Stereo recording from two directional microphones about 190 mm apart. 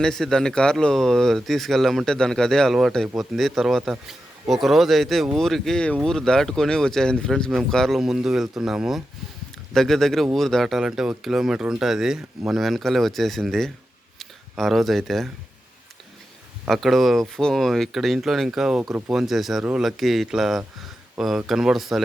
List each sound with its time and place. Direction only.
0.0 s speech: centre (ahead or behind)
16.6 s speech: centre (ahead or behind)